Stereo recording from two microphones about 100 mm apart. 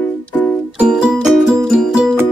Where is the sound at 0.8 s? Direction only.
5° right (ahead or behind).